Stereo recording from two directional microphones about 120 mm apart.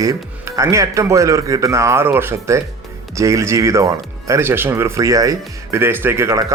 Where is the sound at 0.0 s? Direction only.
25° right (ahead or behind).